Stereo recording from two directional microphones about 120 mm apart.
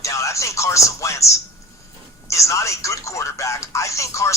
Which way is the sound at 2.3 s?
25° left (ahead or behind).